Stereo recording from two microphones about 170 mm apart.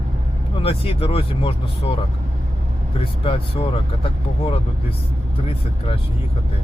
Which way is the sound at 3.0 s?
35° left (ahead or behind).